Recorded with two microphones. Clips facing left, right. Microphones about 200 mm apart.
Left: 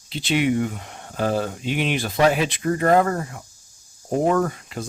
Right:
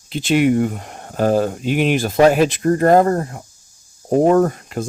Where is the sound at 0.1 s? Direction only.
50° right (ahead or behind).